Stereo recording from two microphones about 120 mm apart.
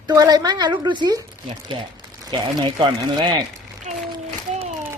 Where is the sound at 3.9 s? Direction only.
70° right (ahead or behind).